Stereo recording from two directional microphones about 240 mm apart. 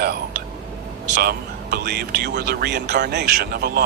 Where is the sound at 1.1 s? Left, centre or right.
Right.